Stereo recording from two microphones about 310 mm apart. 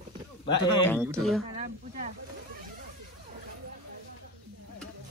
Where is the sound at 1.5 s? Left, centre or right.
Right.